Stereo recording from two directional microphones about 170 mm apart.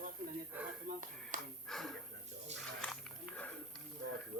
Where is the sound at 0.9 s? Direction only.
50° right (ahead or behind).